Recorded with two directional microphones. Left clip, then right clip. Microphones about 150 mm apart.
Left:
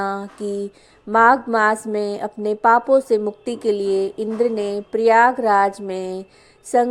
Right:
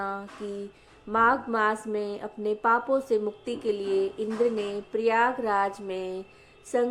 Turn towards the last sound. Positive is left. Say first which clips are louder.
# left 9 dB
turn(degrees=50)  # may be behind; listen again after turning